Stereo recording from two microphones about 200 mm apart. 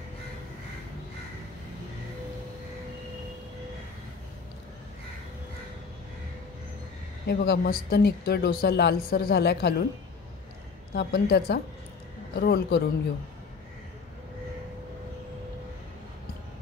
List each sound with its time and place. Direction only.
7.2 s speech: 55° left (ahead or behind)
11.0 s a woman's voice: 55° left (ahead or behind)